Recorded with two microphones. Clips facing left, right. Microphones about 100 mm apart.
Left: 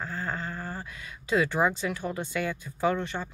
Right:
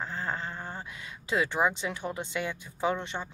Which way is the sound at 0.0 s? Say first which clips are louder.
Left 1 dB; 25° right (ahead or behind).